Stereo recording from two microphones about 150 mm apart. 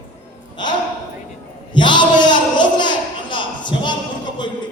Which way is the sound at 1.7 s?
30° left (ahead or behind).